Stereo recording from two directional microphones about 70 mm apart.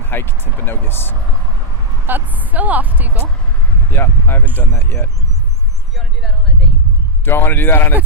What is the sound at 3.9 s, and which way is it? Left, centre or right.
Speech, left.